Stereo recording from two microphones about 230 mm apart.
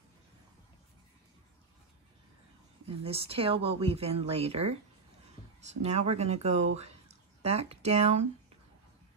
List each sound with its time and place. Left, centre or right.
2.9 s speech: right